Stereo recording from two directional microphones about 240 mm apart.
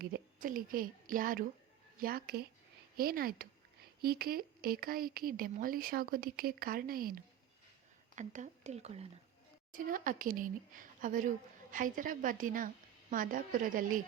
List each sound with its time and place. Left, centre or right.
0.0 s a woman's voice: right